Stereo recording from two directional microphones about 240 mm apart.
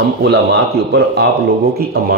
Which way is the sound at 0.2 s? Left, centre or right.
Right.